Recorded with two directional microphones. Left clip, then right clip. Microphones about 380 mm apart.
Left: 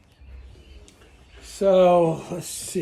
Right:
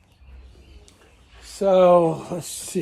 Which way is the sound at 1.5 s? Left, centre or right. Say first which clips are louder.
Right 1 dB; centre.